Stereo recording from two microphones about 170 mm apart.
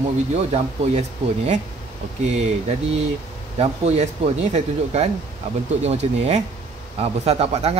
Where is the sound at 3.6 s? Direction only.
40° right (ahead or behind).